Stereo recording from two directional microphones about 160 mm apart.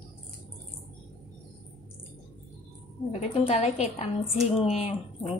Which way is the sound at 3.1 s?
35° left (ahead or behind).